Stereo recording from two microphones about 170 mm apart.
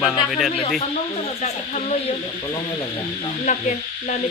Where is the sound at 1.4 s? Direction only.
40° left (ahead or behind).